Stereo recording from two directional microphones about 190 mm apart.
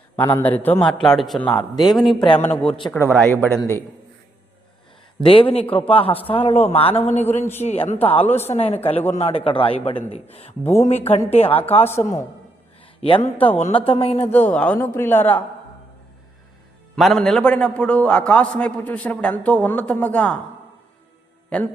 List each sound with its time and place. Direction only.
0.2 s a man's voice: 10° left (ahead or behind)
2.6 s a man's voice: 25° left (ahead or behind)
2.9 s a man's voice: 10° left (ahead or behind)
5.2 s a man's voice: 30° left (ahead or behind)
10.6 s a man's voice: 10° left (ahead or behind)
10.8 s speech: 35° left (ahead or behind)
11.9 s a man's voice: 15° left (ahead or behind)
13.0 s a man's voice: 30° left (ahead or behind)
14.3 s a man's voice: 5° left (ahead or behind)
16.9 s a man's voice: centre (ahead or behind)